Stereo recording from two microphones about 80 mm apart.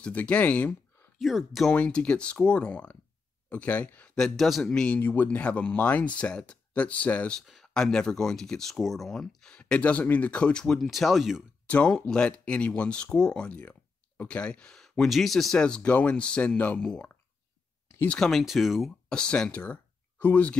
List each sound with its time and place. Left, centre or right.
0.0 s speech: centre
1.1 s speech: centre
1.7 s speech: centre
4.6 s speech: centre
7.3 s speech: centre
11.6 s a sound: centre
11.9 s speech: centre
18.4 s speech: centre
19.0 s speech: centre